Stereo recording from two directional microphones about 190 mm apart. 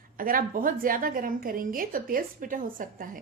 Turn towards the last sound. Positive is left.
turn(degrees=-45)  # may be behind; listen again after turning